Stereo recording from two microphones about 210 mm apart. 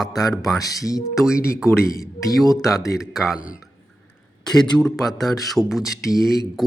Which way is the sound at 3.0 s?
Centre (ahead or behind).